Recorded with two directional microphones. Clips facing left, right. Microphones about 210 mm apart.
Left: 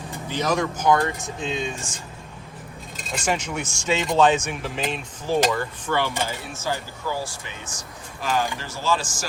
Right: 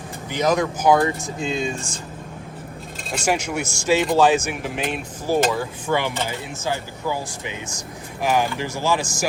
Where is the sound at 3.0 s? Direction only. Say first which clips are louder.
Right 3 dB; centre (ahead or behind).